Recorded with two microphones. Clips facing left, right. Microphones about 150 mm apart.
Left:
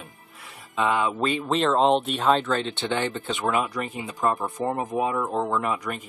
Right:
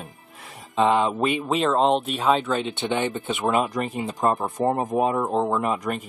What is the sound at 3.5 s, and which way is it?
Speech, 40° right (ahead or behind).